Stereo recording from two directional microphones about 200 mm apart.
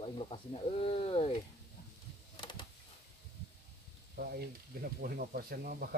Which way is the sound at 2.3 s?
25° left (ahead or behind).